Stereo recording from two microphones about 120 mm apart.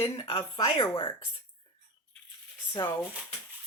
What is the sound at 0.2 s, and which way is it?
Speech, 45° left (ahead or behind).